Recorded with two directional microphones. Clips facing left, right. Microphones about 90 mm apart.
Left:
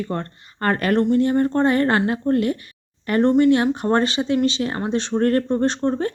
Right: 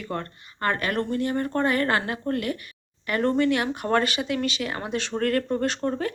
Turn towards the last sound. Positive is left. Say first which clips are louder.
# left 5 dB
turn(degrees=25)  # may be behind; listen again after turning